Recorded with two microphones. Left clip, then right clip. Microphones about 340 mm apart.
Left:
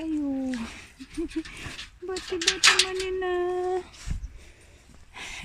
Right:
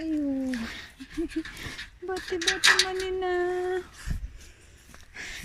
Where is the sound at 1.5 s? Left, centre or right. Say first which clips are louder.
Even; centre.